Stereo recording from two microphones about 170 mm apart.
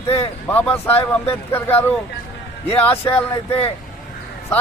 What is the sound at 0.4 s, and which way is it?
Speech, 10° left (ahead or behind).